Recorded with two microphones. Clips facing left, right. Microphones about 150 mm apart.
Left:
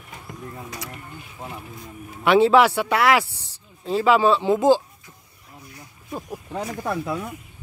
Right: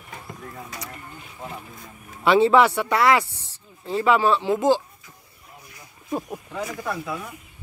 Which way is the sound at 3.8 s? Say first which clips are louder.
Left 2 dB; 15° left (ahead or behind).